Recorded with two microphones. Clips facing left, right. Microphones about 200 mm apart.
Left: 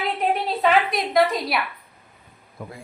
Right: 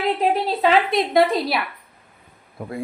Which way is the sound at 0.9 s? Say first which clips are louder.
Right 3 dB; 25° right (ahead or behind).